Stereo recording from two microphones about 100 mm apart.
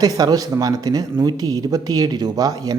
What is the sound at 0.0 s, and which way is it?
Speech, 40° right (ahead or behind).